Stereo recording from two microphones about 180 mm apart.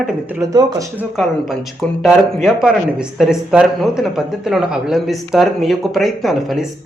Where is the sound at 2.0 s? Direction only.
Centre (ahead or behind).